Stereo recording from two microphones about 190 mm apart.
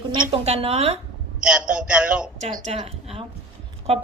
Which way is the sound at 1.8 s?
5° right (ahead or behind).